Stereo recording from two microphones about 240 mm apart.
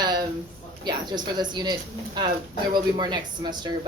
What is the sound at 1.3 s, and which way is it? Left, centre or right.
Speech, centre.